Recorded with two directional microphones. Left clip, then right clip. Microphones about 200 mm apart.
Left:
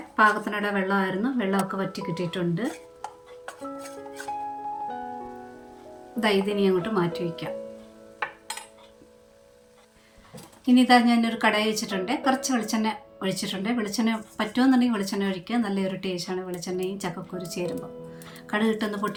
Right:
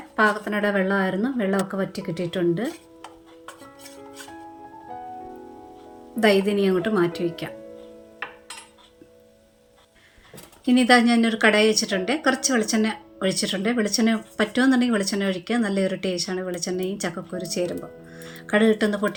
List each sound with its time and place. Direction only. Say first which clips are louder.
0.2 s speech: even; 30° right (ahead or behind)
6.1 s speech: right 4 dB; 20° right (ahead or behind)
10.7 s speech: right 2 dB; 15° right (ahead or behind)